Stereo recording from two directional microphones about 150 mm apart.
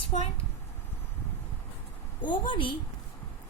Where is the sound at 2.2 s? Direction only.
30° left (ahead or behind).